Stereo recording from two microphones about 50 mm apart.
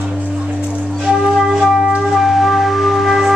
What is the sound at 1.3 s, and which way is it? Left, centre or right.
Music, centre.